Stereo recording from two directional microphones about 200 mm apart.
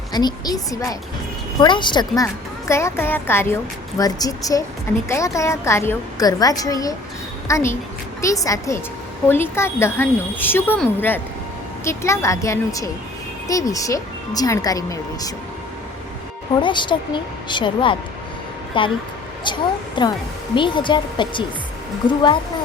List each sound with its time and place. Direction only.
0.1 s a woman's voice: 20° left (ahead or behind)
16.6 s speech: 25° left (ahead or behind)
20.0 s speech: 25° left (ahead or behind)